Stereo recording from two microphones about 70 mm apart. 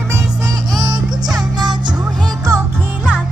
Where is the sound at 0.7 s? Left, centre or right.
Right.